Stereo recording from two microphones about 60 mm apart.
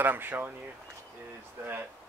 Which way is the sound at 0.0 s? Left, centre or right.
Right.